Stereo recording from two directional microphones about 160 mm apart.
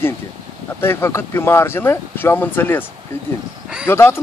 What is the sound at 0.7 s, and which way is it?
Speech, 15° left (ahead or behind).